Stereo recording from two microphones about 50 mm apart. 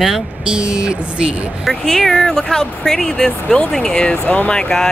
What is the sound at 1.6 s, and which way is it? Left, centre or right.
Speech, centre.